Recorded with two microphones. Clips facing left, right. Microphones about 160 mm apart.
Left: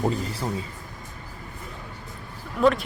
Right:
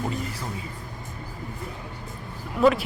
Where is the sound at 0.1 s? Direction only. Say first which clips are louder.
Left 2 dB; 30° left (ahead or behind).